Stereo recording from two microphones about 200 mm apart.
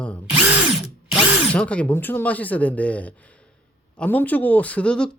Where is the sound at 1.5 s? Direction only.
5° left (ahead or behind).